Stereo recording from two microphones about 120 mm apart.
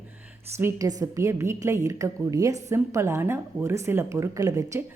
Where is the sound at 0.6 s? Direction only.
30° right (ahead or behind).